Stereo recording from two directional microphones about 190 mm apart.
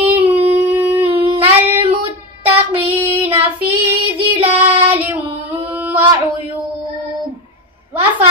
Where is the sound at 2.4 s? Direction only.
10° right (ahead or behind).